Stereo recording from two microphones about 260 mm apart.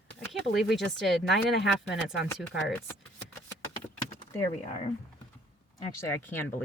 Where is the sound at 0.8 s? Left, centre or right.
Centre.